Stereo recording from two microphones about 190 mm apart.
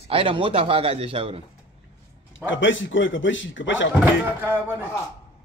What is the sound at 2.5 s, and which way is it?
A man's voice, 80° left.